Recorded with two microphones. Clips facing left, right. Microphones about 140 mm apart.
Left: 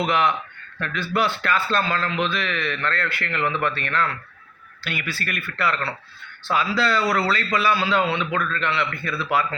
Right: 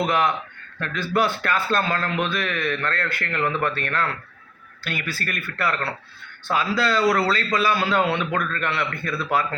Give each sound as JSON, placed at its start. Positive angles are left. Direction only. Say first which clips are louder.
{"t": 0.0, "sound": "a man's voice", "louder": "even", "side_deg": -45}